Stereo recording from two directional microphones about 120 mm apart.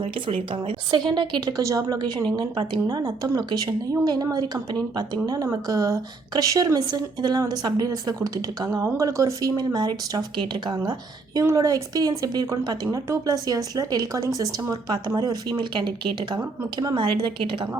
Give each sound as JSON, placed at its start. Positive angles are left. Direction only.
{"t": 0.0, "sound": "a woman's voice", "side_deg": -50}